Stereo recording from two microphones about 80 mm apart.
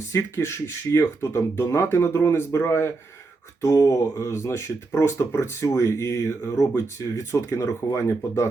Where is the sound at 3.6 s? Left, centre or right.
Left.